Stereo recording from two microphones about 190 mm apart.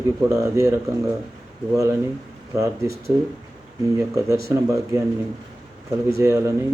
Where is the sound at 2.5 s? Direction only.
15° right (ahead or behind).